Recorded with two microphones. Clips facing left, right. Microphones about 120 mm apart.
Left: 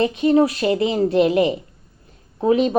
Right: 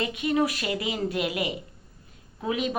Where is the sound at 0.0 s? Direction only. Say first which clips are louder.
Left 9 dB; 35° left (ahead or behind).